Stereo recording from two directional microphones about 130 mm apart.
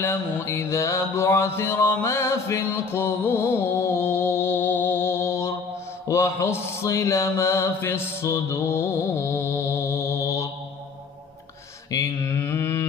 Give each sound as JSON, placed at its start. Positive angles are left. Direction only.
{"t": 0.0, "sound": "mantra", "side_deg": 20}
{"t": 11.9, "sound": "mantra", "side_deg": 25}